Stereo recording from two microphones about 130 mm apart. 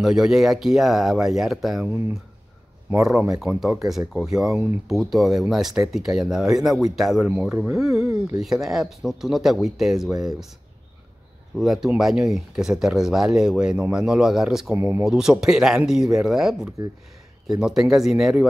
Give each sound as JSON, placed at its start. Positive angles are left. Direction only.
{"t": 0.0, "sound": "speech", "side_deg": -5}
{"t": 3.0, "sound": "speech", "side_deg": -5}
{"t": 11.5, "sound": "speech", "side_deg": 0}
{"t": 14.7, "sound": "speech", "side_deg": -20}
{"t": 15.0, "sound": "speech", "side_deg": -5}